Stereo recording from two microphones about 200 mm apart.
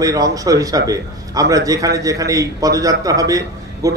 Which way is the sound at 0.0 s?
15° right (ahead or behind).